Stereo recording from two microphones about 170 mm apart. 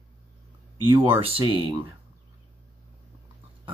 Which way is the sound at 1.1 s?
35° right (ahead or behind).